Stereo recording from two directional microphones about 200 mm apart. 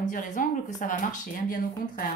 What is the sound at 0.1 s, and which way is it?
Speech, 40° left (ahead or behind).